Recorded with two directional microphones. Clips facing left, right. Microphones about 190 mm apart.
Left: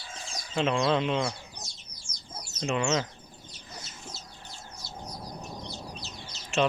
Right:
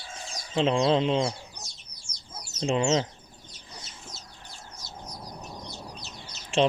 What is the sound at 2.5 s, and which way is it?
Speech, 30° right (ahead or behind).